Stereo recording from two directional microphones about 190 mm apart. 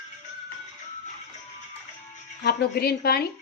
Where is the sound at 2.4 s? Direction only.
55° left (ahead or behind).